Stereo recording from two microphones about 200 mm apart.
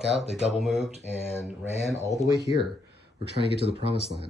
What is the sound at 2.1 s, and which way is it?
Speech, 20° right (ahead or behind).